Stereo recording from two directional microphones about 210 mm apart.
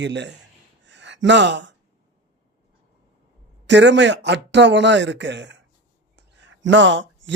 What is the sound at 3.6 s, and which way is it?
Speech, 55° right (ahead or behind).